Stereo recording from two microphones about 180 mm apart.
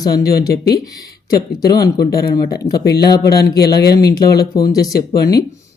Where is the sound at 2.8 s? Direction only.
60° left (ahead or behind).